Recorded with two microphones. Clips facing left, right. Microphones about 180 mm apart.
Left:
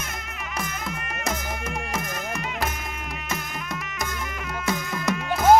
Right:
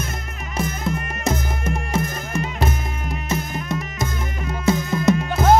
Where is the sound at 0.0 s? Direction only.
30° right (ahead or behind).